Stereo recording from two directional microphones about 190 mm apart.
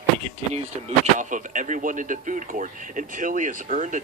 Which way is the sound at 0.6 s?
40° right (ahead or behind).